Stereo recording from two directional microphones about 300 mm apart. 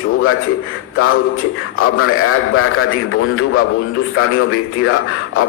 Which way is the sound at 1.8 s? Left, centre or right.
Left.